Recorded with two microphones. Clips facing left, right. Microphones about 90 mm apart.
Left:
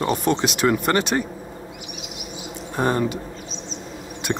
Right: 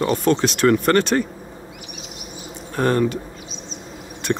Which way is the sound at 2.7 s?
15° left (ahead or behind).